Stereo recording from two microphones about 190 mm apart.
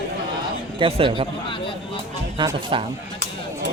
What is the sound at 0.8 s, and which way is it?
Speech, 30° right (ahead or behind).